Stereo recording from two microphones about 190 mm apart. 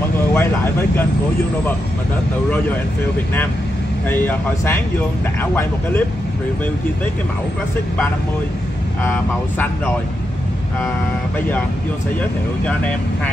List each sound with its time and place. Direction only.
0.3 s speech: 10° left (ahead or behind)
4.1 s speech: 10° left (ahead or behind)
9.0 s speech: 10° left (ahead or behind)